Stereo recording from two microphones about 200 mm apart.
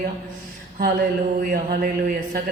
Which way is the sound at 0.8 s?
45° right (ahead or behind).